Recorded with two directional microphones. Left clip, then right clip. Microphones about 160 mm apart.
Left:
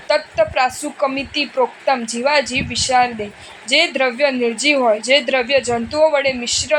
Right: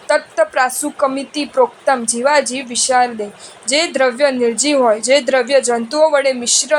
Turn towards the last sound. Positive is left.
turn(degrees=-25)  # may be behind; listen again after turning